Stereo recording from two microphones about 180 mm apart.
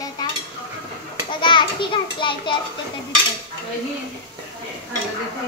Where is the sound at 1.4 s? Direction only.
25° left (ahead or behind).